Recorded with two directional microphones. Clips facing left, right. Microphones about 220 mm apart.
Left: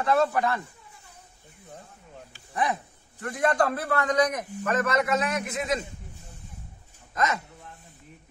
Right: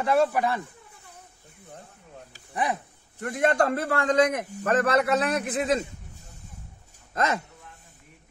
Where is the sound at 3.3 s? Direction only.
25° right (ahead or behind).